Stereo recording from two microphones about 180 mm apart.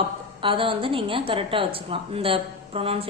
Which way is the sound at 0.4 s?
30° right (ahead or behind).